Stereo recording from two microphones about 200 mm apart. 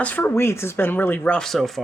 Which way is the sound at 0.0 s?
5° left (ahead or behind).